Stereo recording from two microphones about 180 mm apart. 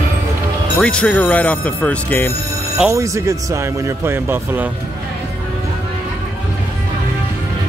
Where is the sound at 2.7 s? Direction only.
15° right (ahead or behind).